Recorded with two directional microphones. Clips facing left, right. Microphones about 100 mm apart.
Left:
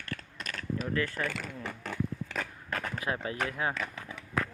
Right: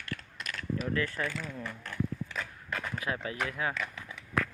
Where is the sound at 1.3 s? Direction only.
80° left.